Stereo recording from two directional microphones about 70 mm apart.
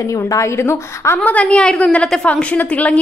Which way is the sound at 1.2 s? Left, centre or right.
Centre.